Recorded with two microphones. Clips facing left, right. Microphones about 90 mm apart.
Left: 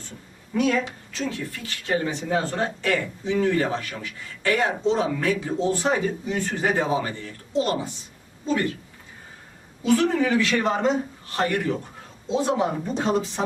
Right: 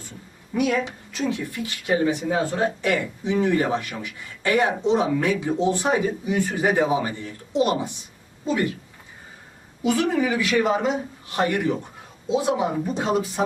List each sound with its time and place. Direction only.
0.5 s speech: 15° right (ahead or behind)
9.8 s speech: 15° right (ahead or behind)